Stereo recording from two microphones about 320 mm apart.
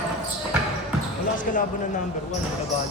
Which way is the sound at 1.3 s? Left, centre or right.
Left.